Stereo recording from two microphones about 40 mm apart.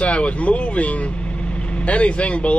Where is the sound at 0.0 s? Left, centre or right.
Left.